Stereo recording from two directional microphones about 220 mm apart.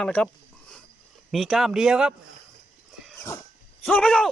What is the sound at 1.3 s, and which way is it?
Speech, centre (ahead or behind).